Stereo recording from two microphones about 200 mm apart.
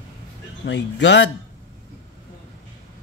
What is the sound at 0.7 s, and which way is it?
Speech, 60° left (ahead or behind).